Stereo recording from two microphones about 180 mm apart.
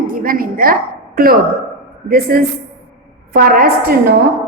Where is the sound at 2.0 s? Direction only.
55° right (ahead or behind).